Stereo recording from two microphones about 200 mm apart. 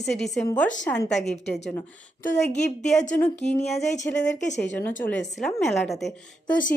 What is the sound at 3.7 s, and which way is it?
Speech, 35° left (ahead or behind).